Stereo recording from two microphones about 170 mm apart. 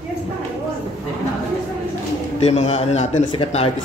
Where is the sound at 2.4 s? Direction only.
40° left (ahead or behind).